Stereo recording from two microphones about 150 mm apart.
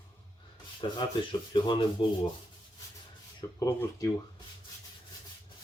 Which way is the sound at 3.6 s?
20° left (ahead or behind).